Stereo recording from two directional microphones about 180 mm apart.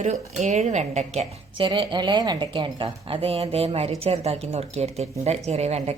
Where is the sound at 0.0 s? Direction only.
40° right (ahead or behind).